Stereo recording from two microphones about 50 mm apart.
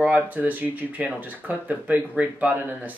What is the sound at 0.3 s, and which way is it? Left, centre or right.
Speech, right.